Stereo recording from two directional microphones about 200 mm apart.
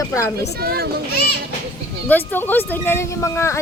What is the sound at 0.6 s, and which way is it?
Speech, 50° right (ahead or behind).